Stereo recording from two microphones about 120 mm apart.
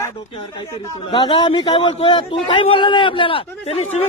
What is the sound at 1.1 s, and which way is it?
A man's voice, 40° left (ahead or behind).